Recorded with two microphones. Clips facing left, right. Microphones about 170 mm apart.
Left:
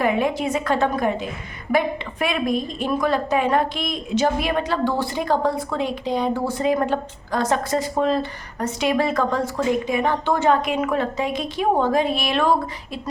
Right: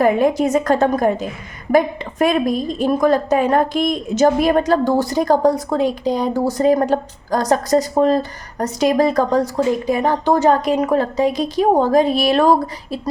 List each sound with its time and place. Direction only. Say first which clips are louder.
0.0 s a woman's voice: right 6 dB; 40° right (ahead or behind)